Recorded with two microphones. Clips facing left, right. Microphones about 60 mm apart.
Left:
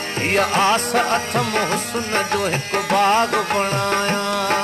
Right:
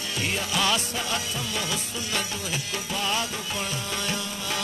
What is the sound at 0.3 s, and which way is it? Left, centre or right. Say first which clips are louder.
Music: left 10 dB; left.